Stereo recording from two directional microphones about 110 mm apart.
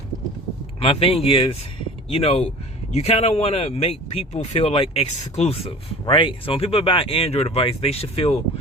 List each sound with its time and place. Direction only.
0.8 s speech: 60° left (ahead or behind)
2.0 s speech: 70° left (ahead or behind)